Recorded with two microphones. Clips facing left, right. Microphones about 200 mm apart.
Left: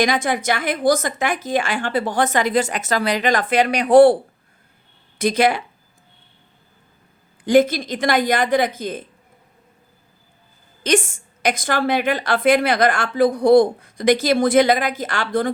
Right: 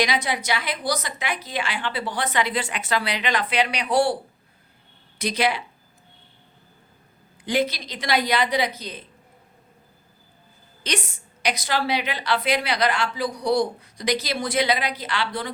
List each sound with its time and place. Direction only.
0.0 s a woman's voice: 50° left (ahead or behind)
7.4 s a woman's voice: 45° left (ahead or behind)
10.8 s a woman's voice: 50° left (ahead or behind)